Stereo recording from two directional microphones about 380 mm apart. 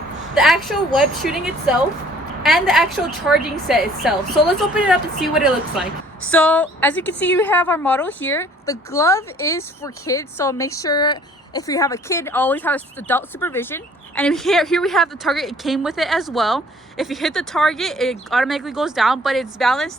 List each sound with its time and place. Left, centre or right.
0.3 s a woman's voice: centre